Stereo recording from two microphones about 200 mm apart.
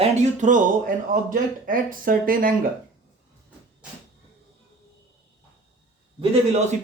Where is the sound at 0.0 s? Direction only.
35° right (ahead or behind).